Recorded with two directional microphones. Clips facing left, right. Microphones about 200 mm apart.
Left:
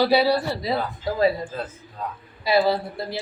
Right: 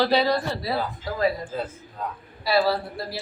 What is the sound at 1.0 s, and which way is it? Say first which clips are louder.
Speech: left 5 dB; 25° left (ahead or behind).